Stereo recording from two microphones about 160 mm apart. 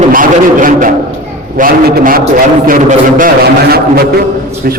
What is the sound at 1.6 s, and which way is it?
A man's voice, 65° right (ahead or behind).